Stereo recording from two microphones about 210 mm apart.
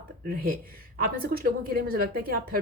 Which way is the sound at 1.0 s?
45° right (ahead or behind).